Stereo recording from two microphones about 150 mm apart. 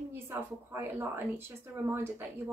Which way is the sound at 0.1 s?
15° right (ahead or behind).